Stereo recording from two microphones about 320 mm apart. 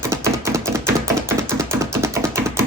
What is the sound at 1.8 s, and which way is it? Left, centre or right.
Computer keyboard, centre.